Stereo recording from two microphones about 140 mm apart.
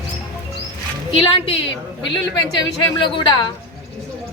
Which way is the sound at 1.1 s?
40° left (ahead or behind).